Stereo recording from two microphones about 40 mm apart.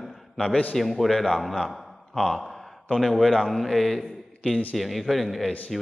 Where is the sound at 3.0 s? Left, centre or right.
Centre.